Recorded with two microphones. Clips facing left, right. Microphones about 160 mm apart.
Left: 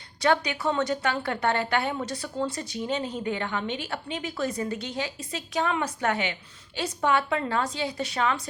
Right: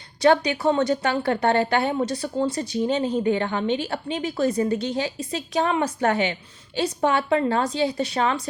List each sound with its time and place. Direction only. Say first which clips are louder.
0.2 s a woman's voice: right 6 dB; 30° right (ahead or behind)